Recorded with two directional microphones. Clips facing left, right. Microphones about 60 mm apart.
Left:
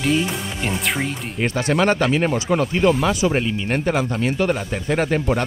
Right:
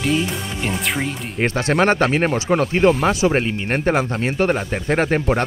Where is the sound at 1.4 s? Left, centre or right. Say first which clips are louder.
Right 2 dB; right.